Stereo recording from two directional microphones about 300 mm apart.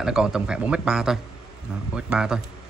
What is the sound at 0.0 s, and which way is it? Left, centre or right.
A man's voice, centre.